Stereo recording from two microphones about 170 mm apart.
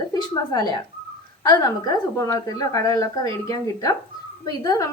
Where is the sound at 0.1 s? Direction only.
25° left (ahead or behind).